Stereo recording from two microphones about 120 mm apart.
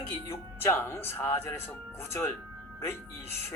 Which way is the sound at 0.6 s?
20° left (ahead or behind).